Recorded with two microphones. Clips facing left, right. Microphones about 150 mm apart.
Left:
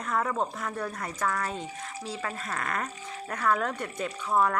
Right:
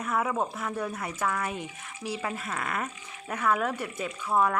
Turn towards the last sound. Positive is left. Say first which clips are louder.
# even
turn(degrees=-5)  # may be behind; listen again after turning